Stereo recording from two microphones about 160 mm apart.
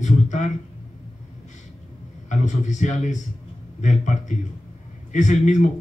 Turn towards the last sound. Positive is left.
turn(degrees=50)  # may be behind; listen again after turning